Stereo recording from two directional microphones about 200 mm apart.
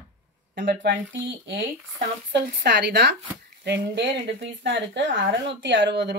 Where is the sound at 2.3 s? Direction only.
60° right (ahead or behind).